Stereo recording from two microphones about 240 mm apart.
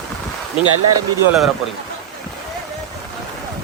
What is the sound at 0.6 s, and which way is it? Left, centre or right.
Speech, right.